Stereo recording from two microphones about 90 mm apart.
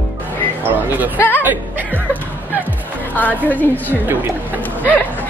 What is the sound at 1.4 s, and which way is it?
Music, 20° right (ahead or behind).